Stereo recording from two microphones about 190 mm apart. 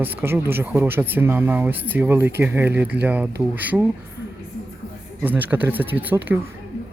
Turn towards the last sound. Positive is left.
turn(degrees=-10)  # may be behind; listen again after turning